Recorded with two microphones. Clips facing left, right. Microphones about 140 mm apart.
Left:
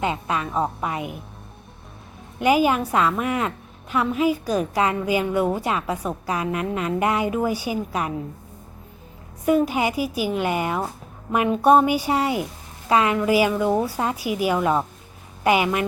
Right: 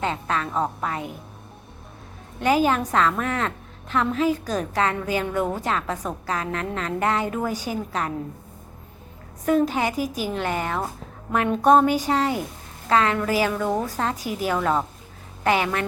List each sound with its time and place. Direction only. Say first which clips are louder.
0.0 s a woman's voice: left 1 dB; 10° left (ahead or behind)
2.4 s a woman's voice: left 2 dB; 10° left (ahead or behind)
9.5 s a woman's voice: left 1 dB; 10° left (ahead or behind)